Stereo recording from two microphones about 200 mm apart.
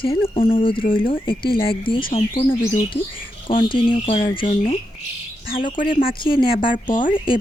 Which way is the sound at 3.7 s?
25° left (ahead or behind).